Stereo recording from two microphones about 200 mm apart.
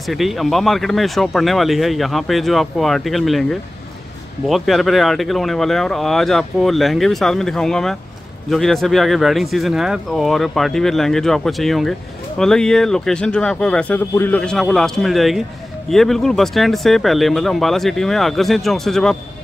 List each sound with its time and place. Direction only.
0.0 s speech: centre (ahead or behind)